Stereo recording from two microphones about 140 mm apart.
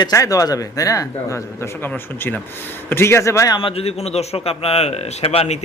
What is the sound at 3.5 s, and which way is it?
Speech, 40° left (ahead or behind).